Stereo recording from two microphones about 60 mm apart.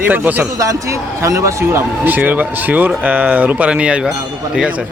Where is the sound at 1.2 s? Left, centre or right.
Right.